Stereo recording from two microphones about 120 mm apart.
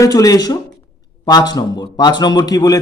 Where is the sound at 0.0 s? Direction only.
30° left (ahead or behind).